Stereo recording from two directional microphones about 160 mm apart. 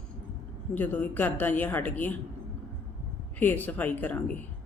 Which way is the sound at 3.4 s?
10° left (ahead or behind).